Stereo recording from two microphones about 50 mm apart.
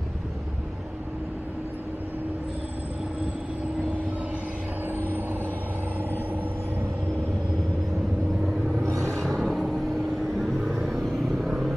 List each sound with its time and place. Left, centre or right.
4.8 s vehicle: right
9.2 s a sound: centre
10.3 s vehicle: centre